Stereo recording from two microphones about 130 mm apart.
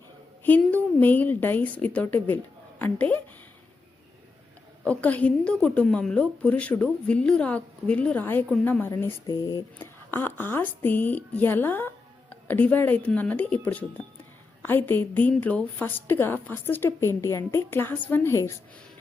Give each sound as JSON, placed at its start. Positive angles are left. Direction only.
{"t": 0.7, "sound": "a woman's voice", "side_deg": 10}
{"t": 4.8, "sound": "a woman's voice", "side_deg": 10}
{"t": 9.3, "sound": "speech", "side_deg": 30}
{"t": 9.7, "sound": "a woman's voice", "side_deg": 15}
{"t": 14.6, "sound": "a woman's voice", "side_deg": 15}